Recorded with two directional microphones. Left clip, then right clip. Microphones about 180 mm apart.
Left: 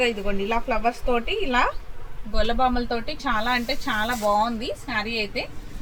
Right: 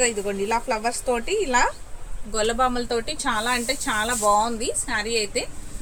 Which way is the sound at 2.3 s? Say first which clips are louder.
Right 1 dB; 35° right (ahead or behind).